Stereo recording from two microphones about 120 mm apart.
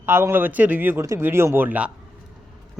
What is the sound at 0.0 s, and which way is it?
Speech, 20° right (ahead or behind).